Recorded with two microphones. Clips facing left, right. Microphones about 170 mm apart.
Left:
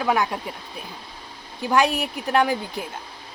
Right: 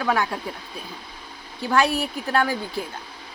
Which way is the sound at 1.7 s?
15° left (ahead or behind).